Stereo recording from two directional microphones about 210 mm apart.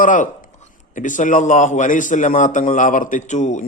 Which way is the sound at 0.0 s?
40° left (ahead or behind).